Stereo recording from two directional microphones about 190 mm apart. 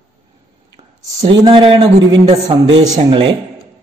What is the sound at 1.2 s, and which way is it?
A man's voice, 25° right (ahead or behind).